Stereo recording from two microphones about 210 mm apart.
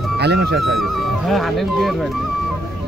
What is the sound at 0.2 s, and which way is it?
Speech, 50° right (ahead or behind).